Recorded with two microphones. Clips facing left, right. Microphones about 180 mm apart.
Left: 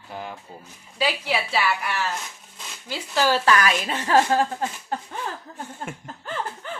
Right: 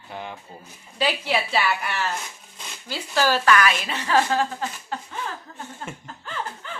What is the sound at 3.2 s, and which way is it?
Speech, 25° left (ahead or behind).